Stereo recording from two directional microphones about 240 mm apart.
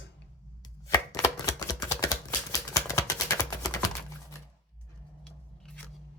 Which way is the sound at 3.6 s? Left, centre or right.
Centre.